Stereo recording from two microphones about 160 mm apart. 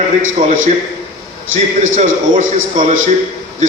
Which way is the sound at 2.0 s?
50° right (ahead or behind).